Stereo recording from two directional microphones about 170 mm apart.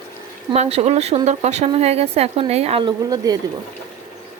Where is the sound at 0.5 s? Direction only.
40° right (ahead or behind).